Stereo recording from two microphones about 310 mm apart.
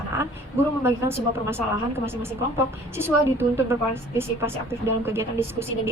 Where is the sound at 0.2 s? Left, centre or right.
Centre.